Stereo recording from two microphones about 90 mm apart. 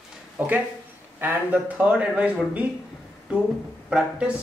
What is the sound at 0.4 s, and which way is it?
Speech, 20° right (ahead or behind).